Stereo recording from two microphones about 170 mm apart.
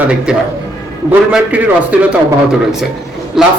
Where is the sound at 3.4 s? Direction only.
5° right (ahead or behind).